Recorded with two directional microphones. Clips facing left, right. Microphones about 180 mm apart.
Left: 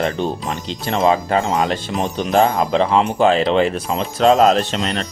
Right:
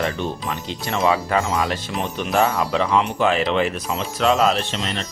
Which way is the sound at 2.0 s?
40° left (ahead or behind).